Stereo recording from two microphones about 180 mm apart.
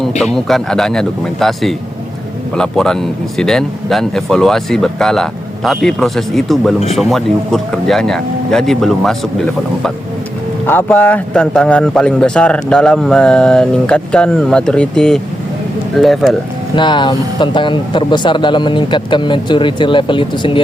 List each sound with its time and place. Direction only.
0.3 s speech: centre (ahead or behind)
10.7 s speech: 10° left (ahead or behind)
16.7 s speech: 25° left (ahead or behind)